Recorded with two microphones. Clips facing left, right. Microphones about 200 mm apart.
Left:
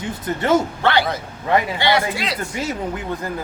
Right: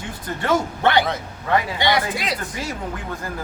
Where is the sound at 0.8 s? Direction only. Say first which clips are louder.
Even; 20° right (ahead or behind).